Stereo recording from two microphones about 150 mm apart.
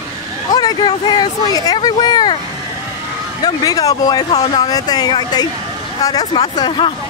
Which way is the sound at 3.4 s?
25° left (ahead or behind).